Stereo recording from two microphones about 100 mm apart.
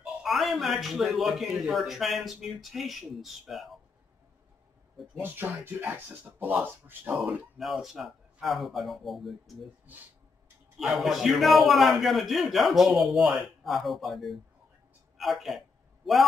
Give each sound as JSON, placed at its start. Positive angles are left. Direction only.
{"t": 0.0, "sound": "a man's voice", "side_deg": -5}
{"t": 5.2, "sound": "speech", "side_deg": -20}
{"t": 7.5, "sound": "a man's voice", "side_deg": 0}
{"t": 10.8, "sound": "a man's voice", "side_deg": 0}